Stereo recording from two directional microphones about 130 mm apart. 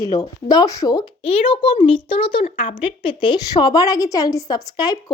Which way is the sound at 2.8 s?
40° left (ahead or behind).